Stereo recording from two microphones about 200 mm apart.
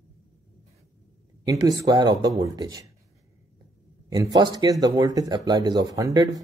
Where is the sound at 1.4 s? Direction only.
20° right (ahead or behind).